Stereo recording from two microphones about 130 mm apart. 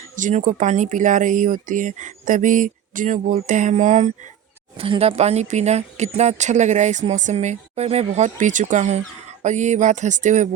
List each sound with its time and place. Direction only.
0.2 s speech: 75° right (ahead or behind)
4.8 s speech: 45° right (ahead or behind); by 10.5 s 70° right (ahead or behind)